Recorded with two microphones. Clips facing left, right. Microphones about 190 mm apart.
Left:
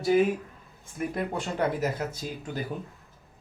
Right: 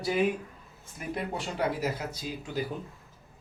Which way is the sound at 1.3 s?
50° left (ahead or behind).